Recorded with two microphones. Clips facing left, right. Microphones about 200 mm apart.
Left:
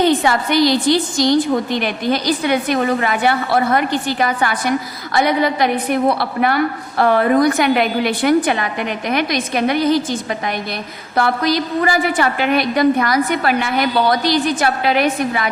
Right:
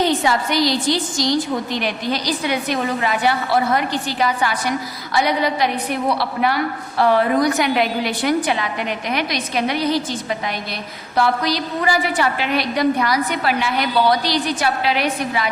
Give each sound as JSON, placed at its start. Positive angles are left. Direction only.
{"t": 0.2, "sound": "a woman's voice", "side_deg": 55}